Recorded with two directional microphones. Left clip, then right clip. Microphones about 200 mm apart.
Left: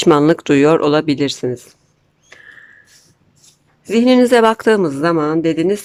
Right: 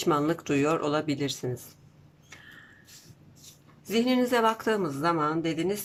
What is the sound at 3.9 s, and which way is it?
Speech, 45° left (ahead or behind).